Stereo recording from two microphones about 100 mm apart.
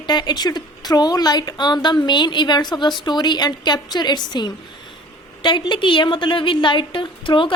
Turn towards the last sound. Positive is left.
turn(degrees=55)  # may be behind; listen again after turning